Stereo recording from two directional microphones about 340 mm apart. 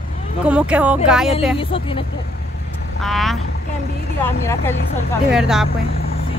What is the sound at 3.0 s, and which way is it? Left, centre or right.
Speech, centre.